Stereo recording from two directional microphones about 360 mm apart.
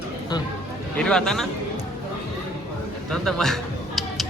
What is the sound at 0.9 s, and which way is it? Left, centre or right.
Speech, centre.